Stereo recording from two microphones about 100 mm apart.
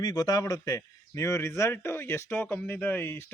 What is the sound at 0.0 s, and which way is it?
A man's voice, 40° left (ahead or behind).